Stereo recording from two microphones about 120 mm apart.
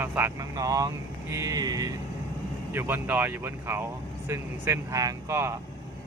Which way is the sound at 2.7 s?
20° right (ahead or behind).